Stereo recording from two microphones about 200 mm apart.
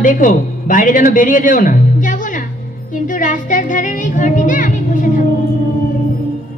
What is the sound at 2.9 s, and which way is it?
Music, 40° left (ahead or behind).